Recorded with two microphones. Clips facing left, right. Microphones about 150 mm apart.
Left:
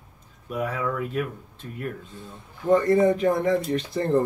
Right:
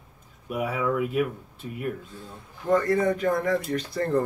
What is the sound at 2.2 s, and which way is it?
Speech, 20° left (ahead or behind).